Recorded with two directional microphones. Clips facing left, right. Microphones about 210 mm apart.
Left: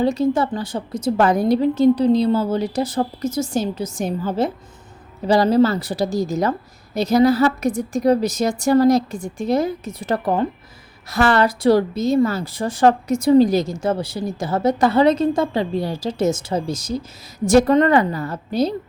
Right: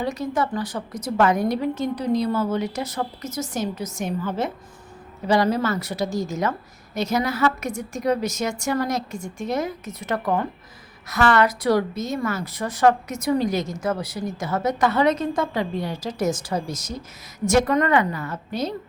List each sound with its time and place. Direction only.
0.0 s a woman's voice: 30° left (ahead or behind)